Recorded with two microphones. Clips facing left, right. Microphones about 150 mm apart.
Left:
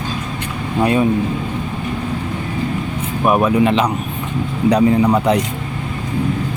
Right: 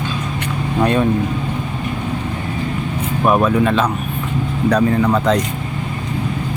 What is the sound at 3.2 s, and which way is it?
Speech, 15° left (ahead or behind).